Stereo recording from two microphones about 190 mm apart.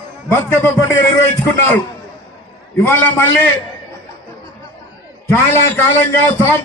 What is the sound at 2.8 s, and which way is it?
Speech, 10° left (ahead or behind).